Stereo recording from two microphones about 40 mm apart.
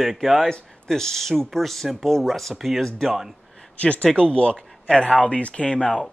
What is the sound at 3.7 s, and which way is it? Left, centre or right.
Speech, left.